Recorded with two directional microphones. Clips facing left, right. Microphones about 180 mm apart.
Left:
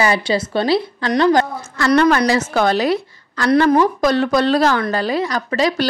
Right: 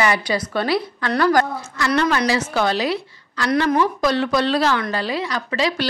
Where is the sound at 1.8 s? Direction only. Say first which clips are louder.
Left 6 dB; 55° left (ahead or behind).